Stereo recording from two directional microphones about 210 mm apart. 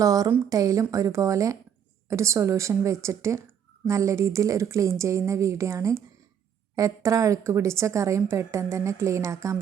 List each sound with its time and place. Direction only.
0.0 s a woman's voice: 15° right (ahead or behind)